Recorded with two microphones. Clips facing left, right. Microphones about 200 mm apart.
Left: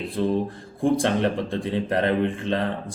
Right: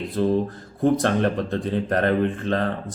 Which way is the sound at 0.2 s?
20° left (ahead or behind).